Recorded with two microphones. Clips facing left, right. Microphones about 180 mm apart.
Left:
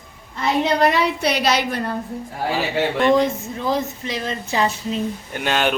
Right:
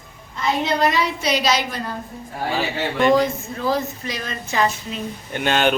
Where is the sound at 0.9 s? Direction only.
60° left (ahead or behind).